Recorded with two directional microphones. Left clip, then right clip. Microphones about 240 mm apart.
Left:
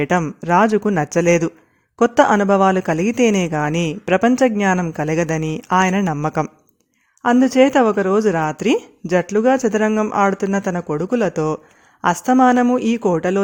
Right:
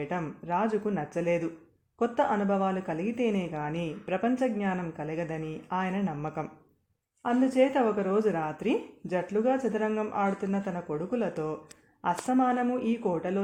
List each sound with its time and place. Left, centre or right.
0.0 s speech: left